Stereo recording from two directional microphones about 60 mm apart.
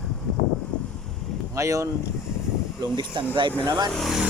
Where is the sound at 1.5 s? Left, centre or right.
Right.